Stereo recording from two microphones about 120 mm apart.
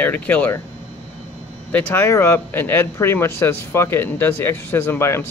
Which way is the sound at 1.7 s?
20° left (ahead or behind).